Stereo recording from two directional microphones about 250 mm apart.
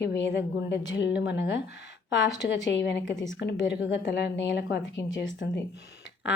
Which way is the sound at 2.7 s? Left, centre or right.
Left.